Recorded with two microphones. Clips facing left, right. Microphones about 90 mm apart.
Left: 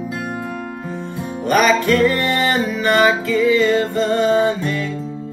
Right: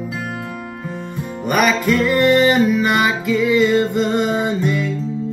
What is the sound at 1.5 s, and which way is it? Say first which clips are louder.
Music: left 2 dB; 5° right (ahead or behind).